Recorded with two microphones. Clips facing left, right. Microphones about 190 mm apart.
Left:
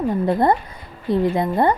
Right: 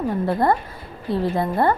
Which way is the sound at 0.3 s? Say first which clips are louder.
Left 2 dB; 20° left (ahead or behind).